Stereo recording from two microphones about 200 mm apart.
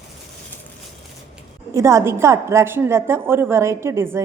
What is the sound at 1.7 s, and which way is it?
A woman's voice, 15° right (ahead or behind).